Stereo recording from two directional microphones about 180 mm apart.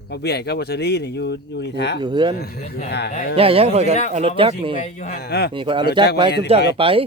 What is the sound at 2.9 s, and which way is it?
Speech, 65° left (ahead or behind).